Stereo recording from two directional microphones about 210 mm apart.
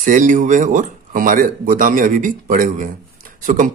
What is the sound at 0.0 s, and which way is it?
Speech, 40° right (ahead or behind).